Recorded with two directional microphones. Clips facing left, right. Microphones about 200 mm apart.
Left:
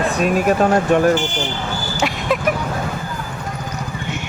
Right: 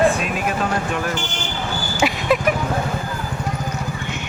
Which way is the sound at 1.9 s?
Centre (ahead or behind).